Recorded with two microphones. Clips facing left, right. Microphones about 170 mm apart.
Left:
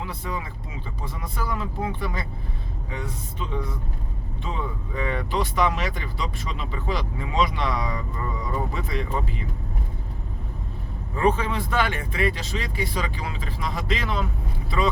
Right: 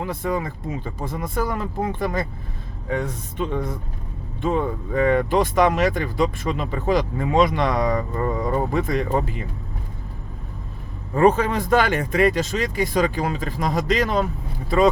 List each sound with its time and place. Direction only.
0.0 s speech: 50° right (ahead or behind)
11.1 s speech: 45° right (ahead or behind)